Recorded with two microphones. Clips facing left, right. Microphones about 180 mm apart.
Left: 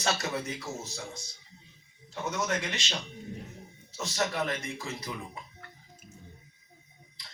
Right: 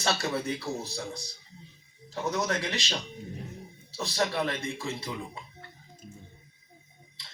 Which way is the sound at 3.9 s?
35° right (ahead or behind).